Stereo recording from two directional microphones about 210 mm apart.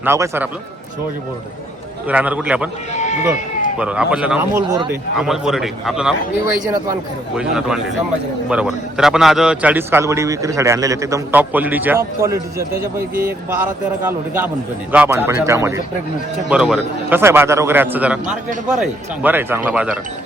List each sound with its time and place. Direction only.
0.0 s a man's voice: 10° right (ahead or behind)
2.0 s a man's voice: 5° right (ahead or behind)
2.9 s sheep: 35° left (ahead or behind)
3.8 s a man's voice: 5° right (ahead or behind)
14.1 s a man's voice: 10° right (ahead or behind)